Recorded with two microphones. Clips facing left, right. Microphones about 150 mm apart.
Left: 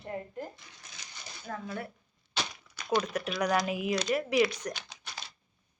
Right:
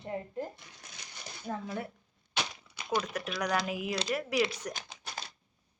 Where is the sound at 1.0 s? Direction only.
55° right (ahead or behind).